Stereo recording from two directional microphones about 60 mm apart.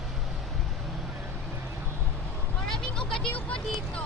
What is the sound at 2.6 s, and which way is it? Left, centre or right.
Vehicle, centre.